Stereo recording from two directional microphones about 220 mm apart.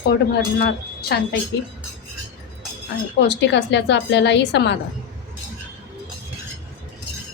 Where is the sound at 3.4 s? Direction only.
55° left (ahead or behind).